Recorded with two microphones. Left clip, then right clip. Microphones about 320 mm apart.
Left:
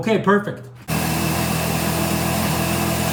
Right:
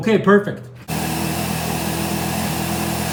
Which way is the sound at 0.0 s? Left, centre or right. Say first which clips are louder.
Right 3 dB; centre.